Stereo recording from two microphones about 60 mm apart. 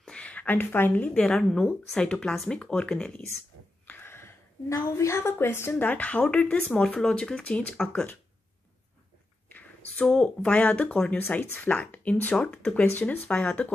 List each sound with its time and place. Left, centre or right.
0.0 s speech: centre
1.2 s speech: centre
3.8 s a sound: left
4.7 s a woman's voice: left; by 7.8 s centre
9.5 s a sound: left
10.0 s speech: centre
11.1 s speech: left